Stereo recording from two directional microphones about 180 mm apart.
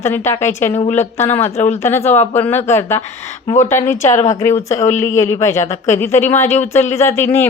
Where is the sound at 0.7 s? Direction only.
35° left (ahead or behind).